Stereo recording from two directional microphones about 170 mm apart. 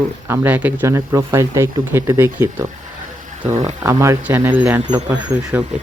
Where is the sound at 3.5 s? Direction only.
45° right (ahead or behind).